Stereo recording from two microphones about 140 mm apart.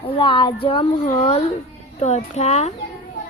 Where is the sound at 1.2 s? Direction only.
45° left (ahead or behind).